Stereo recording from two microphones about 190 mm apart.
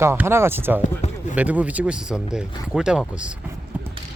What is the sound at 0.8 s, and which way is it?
Speech, 40° left (ahead or behind).